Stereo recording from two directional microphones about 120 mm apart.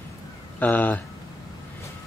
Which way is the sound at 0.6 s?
15° left (ahead or behind).